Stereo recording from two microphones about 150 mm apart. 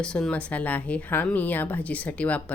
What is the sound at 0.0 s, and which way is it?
A woman's voice, 5° left (ahead or behind).